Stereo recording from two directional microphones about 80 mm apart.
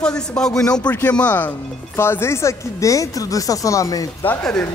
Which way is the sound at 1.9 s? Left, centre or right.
Left.